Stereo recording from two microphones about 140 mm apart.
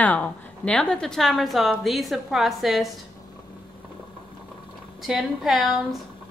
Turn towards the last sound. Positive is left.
turn(degrees=-5)  # may be behind; listen again after turning